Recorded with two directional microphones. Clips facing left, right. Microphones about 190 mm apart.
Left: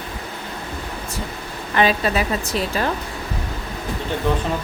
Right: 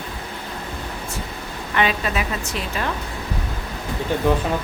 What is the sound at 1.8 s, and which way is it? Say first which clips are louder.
A woman's voice: left 3 dB; 35° left (ahead or behind).